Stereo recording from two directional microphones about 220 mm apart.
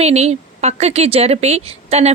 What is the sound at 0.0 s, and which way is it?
Speech, 30° right (ahead or behind).